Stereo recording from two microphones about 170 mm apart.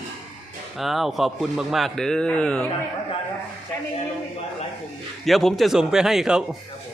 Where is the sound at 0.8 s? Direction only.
Centre (ahead or behind).